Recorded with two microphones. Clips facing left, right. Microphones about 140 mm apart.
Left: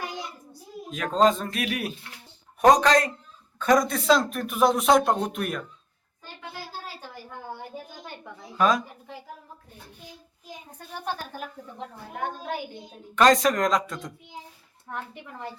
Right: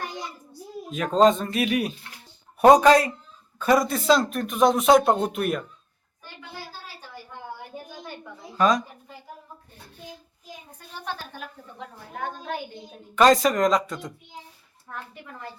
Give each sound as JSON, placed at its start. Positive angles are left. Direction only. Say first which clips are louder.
{"t": 0.9, "sound": "speech", "louder": "right 3 dB", "side_deg": 0}
{"t": 8.5, "sound": "speech", "louder": "right 1 dB", "side_deg": 5}
{"t": 12.2, "sound": "a child's voice", "louder": "even", "side_deg": 10}
{"t": 13.1, "sound": "speech", "louder": "right 1 dB", "side_deg": 0}
{"t": 14.8, "sound": "a woman's voice", "louder": "left 3 dB", "side_deg": 20}